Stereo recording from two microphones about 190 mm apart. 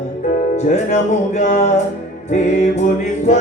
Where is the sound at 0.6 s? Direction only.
40° left (ahead or behind).